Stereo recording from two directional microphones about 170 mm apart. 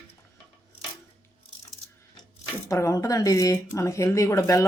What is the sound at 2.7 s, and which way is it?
Speech, 15° left (ahead or behind).